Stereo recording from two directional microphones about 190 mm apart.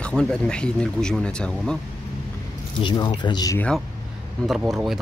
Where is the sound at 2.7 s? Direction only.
25° left (ahead or behind).